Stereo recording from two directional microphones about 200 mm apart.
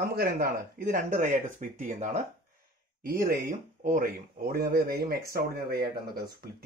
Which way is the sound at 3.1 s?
50° right (ahead or behind).